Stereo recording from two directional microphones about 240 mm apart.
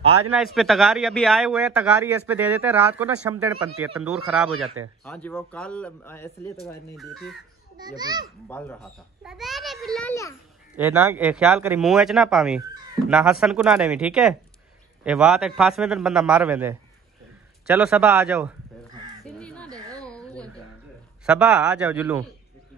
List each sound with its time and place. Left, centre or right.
0.6 s a man's voice: centre
7.7 s a child's voice: centre
8.5 s a man's voice: centre
10.8 s a man's voice: centre
19.2 s crow: centre
20.1 s a sound: centre
21.3 s a man's voice: centre